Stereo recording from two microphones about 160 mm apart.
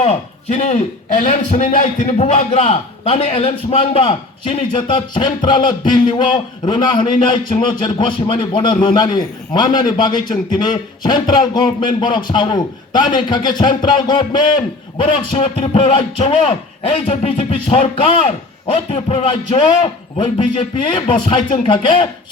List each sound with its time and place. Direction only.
0.0 s a man's voice: 40° left (ahead or behind)